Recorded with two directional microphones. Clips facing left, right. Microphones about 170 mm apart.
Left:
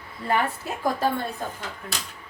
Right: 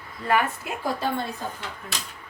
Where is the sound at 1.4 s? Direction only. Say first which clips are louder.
Left 1 dB; 55° left (ahead or behind).